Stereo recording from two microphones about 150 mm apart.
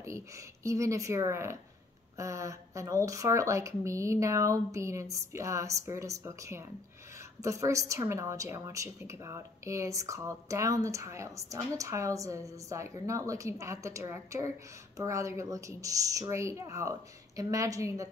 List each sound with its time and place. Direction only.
0.0 s a woman's voice: 20° right (ahead or behind)